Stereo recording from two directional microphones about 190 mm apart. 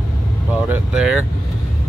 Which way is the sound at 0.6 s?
5° right (ahead or behind).